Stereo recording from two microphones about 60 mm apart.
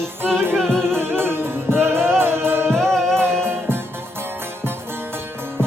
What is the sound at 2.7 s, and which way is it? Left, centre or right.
Music, centre.